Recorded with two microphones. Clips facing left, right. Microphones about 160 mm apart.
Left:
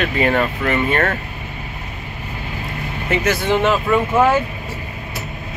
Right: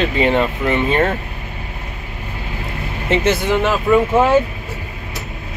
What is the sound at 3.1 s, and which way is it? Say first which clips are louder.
Speech: right 3 dB; 25° right (ahead or behind).